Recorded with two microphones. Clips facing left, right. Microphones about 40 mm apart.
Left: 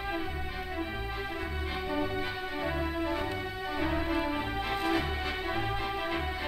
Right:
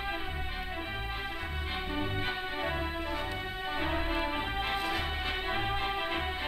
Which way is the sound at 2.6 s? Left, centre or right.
Right.